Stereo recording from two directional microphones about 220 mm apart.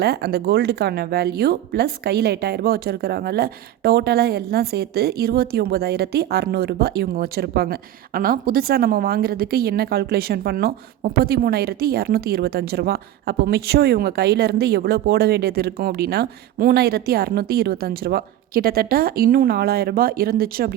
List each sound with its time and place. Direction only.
0.0 s speech: 45° right (ahead or behind)